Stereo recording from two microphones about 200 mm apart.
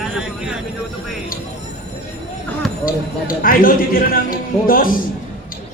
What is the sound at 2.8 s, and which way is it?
A man's voice, 45° left (ahead or behind).